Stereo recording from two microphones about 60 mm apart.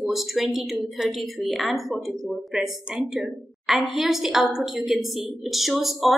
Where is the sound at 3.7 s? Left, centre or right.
Centre.